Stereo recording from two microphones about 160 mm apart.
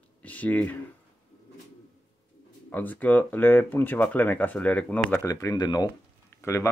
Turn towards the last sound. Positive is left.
turn(degrees=15)  # may be behind; listen again after turning